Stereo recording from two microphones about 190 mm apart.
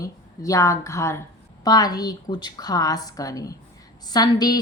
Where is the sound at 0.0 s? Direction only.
15° left (ahead or behind).